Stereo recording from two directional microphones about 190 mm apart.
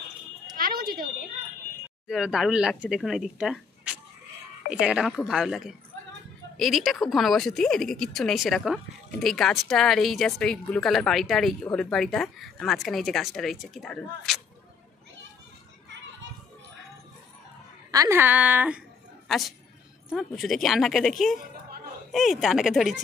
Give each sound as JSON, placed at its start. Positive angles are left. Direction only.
{"t": 0.6, "sound": "smoke detector", "side_deg": -50}
{"t": 2.0, "sound": "a woman's voice", "side_deg": -5}
{"t": 17.9, "sound": "a woman's voice", "side_deg": -15}